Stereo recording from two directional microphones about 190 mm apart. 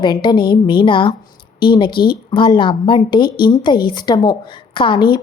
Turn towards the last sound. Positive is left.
turn(degrees=25)  # may be behind; listen again after turning